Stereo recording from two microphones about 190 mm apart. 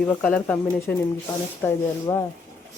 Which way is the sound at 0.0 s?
5° left (ahead or behind).